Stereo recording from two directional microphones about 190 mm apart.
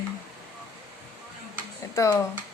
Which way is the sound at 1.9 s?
15° left (ahead or behind).